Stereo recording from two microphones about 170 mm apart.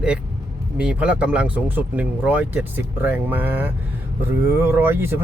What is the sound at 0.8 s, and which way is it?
Speech, 5° right (ahead or behind).